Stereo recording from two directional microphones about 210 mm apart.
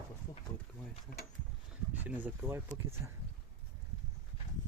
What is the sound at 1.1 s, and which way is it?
Speech, 45° left (ahead or behind).